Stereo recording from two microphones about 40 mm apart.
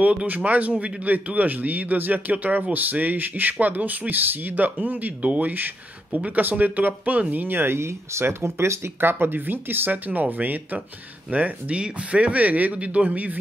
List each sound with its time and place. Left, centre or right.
0.0 s speech: right
1.1 s speech: right
7.5 s speech: right
11.2 s speech: right